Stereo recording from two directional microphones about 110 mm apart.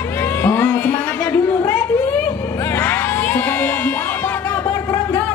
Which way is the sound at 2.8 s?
15° left (ahead or behind).